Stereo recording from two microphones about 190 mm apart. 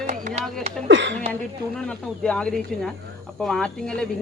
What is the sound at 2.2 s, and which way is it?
A woman's voice, 5° left (ahead or behind).